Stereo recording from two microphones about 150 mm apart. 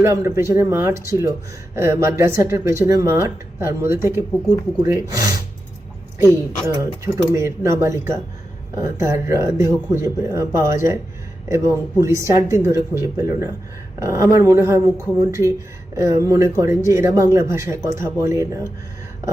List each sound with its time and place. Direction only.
0.0 s speech: 20° right (ahead or behind)